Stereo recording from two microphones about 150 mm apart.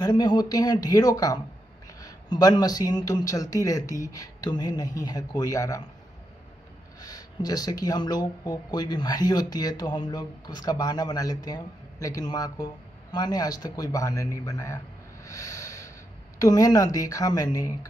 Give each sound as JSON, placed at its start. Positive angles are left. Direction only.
{"t": 0.0, "sound": "speech", "side_deg": 25}
{"t": 7.0, "sound": "speech", "side_deg": 25}
{"t": 15.2, "sound": "snort", "side_deg": 20}
{"t": 16.3, "sound": "speech", "side_deg": 25}